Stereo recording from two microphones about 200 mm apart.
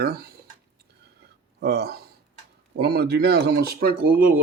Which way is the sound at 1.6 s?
50° right (ahead or behind).